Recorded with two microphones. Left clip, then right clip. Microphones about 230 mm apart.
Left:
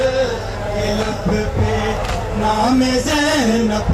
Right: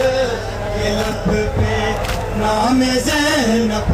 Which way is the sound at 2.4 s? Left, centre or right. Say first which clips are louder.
Even; centre.